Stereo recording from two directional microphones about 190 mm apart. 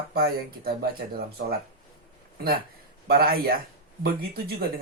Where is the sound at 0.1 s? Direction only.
50° right (ahead or behind).